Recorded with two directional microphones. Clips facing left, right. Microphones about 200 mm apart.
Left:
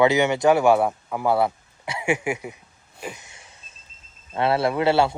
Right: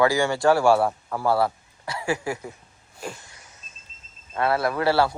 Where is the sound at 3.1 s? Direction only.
20° left (ahead or behind).